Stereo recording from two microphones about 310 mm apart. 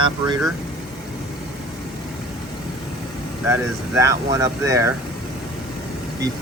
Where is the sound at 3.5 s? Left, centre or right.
Centre.